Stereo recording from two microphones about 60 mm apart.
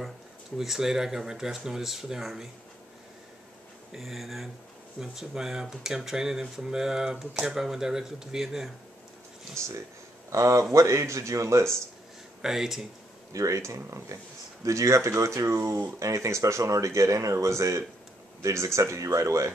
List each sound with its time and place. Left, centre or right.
0.6 s speech: centre
3.9 s speech: centre
10.3 s speech: right
12.4 s speech: centre
13.3 s speech: right